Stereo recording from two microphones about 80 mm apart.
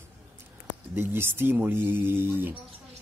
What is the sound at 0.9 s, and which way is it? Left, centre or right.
Speech, right.